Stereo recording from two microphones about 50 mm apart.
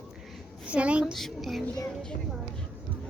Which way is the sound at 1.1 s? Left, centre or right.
Centre.